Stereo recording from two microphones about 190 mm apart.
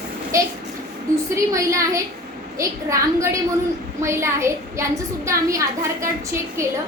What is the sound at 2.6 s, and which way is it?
A woman's voice, 15° right (ahead or behind).